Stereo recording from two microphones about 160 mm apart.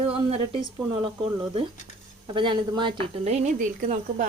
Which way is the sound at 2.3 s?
30° right (ahead or behind).